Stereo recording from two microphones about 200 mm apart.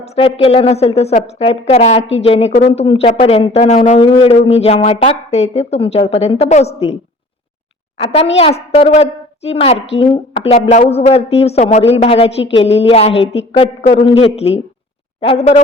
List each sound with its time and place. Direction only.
0.2 s a woman's voice: 30° left (ahead or behind)